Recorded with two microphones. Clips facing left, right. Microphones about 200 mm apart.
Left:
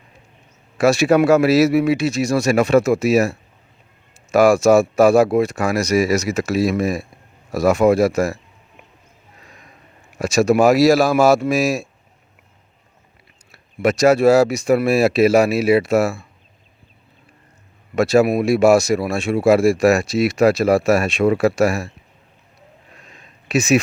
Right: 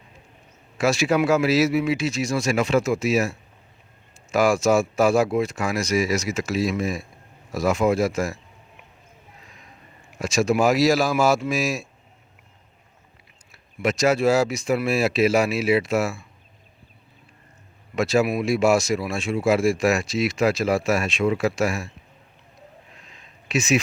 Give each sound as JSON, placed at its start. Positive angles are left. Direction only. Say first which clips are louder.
{"t": 0.8, "sound": "speech", "louder": "left 6 dB", "side_deg": 65}
{"t": 10.2, "sound": "speech", "louder": "left 6 dB", "side_deg": 65}
{"t": 13.5, "sound": "speech", "louder": "left 6 dB", "side_deg": 65}
{"t": 17.9, "sound": "speech", "louder": "left 6 dB", "side_deg": 65}
{"t": 23.5, "sound": "speech", "louder": "left 5 dB", "side_deg": 65}